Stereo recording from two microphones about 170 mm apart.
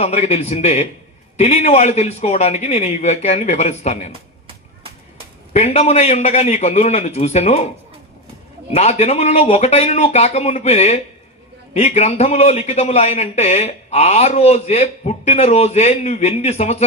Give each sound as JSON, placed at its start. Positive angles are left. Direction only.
{"t": 0.0, "sound": "a man's voice", "side_deg": 40}
{"t": 4.4, "sound": "a sound", "side_deg": -30}
{"t": 5.5, "sound": "a man's voice", "side_deg": 40}
{"t": 8.7, "sound": "a man's voice", "side_deg": 40}